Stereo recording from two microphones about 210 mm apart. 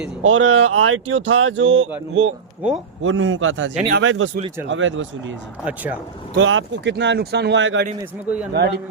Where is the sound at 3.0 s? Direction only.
65° right (ahead or behind).